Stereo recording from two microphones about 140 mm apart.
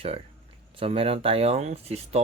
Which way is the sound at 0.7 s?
40° right (ahead or behind).